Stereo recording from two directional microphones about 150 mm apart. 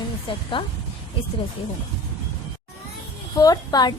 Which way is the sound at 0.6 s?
35° left (ahead or behind).